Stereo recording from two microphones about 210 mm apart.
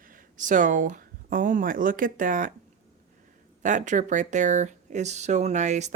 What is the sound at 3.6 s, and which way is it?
Speech, 35° right (ahead or behind).